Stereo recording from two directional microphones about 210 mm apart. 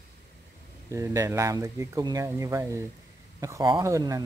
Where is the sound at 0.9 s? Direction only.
15° right (ahead or behind).